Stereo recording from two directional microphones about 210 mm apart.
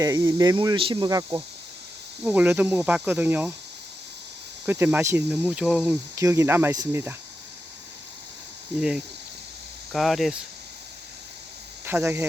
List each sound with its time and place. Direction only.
0.0 s speech: 15° right (ahead or behind)
4.6 s speech: 10° right (ahead or behind)
8.8 s speech: 5° right (ahead or behind)
11.9 s speech: 10° right (ahead or behind)